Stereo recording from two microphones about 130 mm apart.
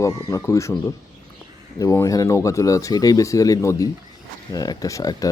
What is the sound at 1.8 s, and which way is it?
Speech, 25° left (ahead or behind).